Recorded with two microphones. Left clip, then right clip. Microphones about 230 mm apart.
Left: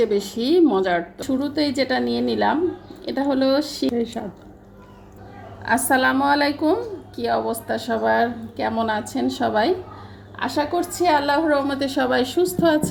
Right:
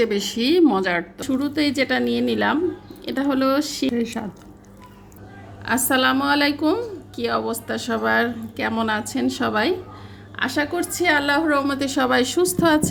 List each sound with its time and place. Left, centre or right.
0.3 s a woman's voice: right
4.2 s speech: right
5.6 s a woman's voice: right